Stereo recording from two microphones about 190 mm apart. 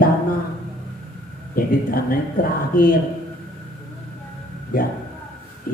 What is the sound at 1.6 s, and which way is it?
Speech, 50° left (ahead or behind).